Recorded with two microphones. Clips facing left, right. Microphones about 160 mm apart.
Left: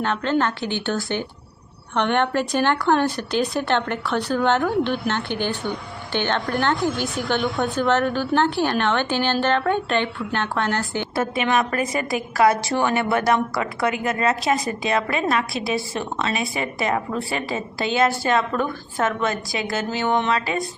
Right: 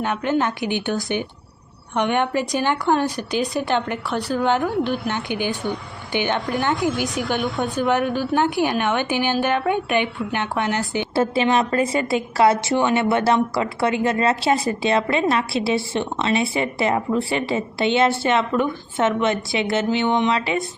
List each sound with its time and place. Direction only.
0.0 s a woman's voice: 10° right (ahead or behind)
11.1 s a woman's voice: 30° right (ahead or behind)